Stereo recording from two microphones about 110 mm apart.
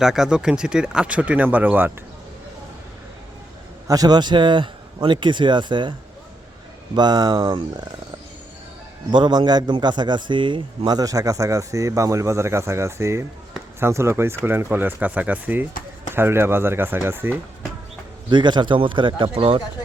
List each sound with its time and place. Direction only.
0.0 s speech: 5° right (ahead or behind)
3.8 s a man's voice: 35° right (ahead or behind)
6.9 s a man's voice: 40° right (ahead or behind)
9.1 s a man's voice: 45° right (ahead or behind); by 17.3 s 20° right (ahead or behind)
18.3 s a man's voice: 45° right (ahead or behind)